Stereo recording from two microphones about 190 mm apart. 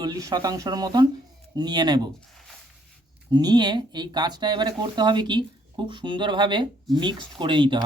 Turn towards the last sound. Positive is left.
turn(degrees=-25)  # may be behind; listen again after turning